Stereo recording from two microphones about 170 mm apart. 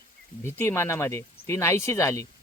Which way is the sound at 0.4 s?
15° left (ahead or behind).